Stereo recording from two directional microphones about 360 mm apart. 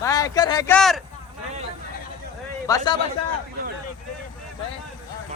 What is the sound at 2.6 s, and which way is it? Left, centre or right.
Speech, centre.